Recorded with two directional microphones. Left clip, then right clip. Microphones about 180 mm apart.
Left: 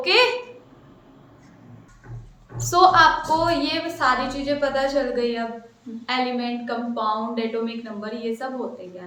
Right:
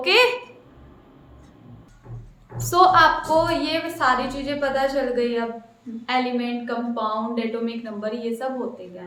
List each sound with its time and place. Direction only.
0.0 s a woman's voice: 20° right (ahead or behind)
2.6 s a woman's voice: 10° right (ahead or behind)